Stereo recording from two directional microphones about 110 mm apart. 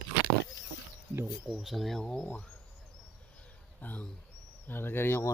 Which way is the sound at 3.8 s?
15° left (ahead or behind).